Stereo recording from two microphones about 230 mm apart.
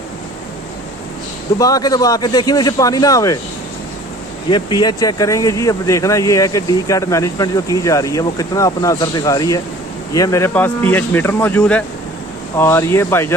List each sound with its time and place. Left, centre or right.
1.6 s speech: centre
4.5 s speech: centre